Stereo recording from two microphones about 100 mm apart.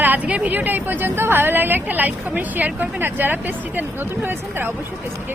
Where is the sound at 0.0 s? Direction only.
15° right (ahead or behind).